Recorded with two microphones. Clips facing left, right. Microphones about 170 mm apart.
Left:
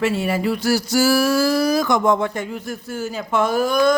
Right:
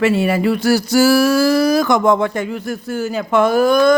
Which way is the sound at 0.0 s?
70° right (ahead or behind).